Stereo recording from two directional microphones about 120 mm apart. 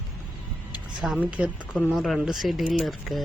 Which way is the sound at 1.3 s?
10° right (ahead or behind).